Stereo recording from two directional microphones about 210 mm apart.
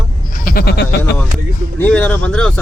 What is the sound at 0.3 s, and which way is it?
Speech, 45° left (ahead or behind).